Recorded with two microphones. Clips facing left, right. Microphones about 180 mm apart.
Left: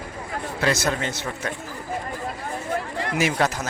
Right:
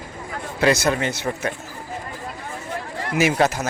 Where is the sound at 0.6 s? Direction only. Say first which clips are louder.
Right 5 dB; 10° right (ahead or behind).